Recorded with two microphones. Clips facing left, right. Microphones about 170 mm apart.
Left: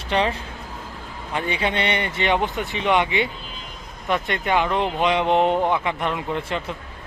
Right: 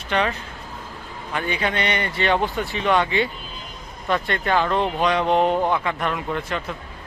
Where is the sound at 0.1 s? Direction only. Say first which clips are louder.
Left 1 dB; 30° left (ahead or behind).